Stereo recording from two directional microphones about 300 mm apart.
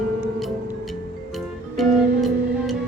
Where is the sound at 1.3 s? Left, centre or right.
Centre.